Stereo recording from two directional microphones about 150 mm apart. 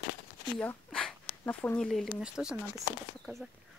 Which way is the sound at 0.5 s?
5° left (ahead or behind).